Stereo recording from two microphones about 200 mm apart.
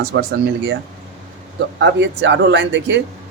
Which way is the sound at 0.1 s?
55° right (ahead or behind).